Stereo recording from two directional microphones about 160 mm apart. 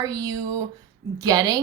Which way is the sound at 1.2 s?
25° right (ahead or behind).